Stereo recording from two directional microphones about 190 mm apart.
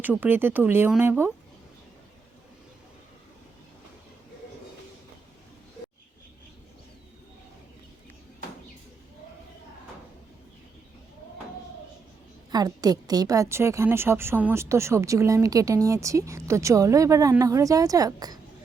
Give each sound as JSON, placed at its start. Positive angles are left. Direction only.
{"t": 0.0, "sound": "a woman's voice", "side_deg": -10}
{"t": 12.5, "sound": "a woman's voice", "side_deg": -20}